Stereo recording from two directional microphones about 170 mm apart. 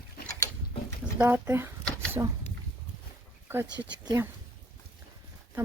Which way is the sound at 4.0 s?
20° right (ahead or behind).